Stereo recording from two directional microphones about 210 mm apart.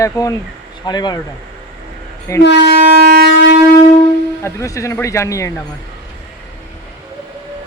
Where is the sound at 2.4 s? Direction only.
55° left (ahead or behind).